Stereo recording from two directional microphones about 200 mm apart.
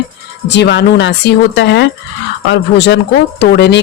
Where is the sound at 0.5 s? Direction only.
60° left (ahead or behind).